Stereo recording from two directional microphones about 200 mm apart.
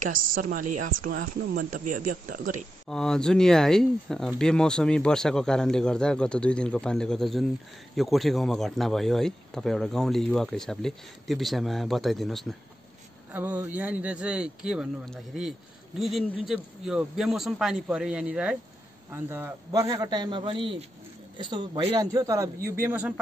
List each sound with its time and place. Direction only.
0.1 s speech: 45° right (ahead or behind)
2.9 s speech: 5° left (ahead or behind)
13.3 s a man's voice: 10° right (ahead or behind)